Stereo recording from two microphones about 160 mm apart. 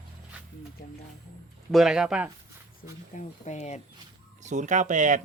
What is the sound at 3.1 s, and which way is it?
Speech, 45° left (ahead or behind).